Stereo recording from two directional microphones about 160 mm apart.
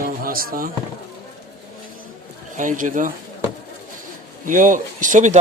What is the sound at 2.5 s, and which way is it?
Speech, 50° right (ahead or behind).